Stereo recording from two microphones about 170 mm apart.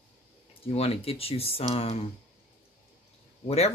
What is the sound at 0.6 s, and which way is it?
Speech, 35° left (ahead or behind).